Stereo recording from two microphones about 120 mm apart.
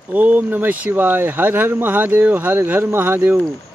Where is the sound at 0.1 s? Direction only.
15° right (ahead or behind).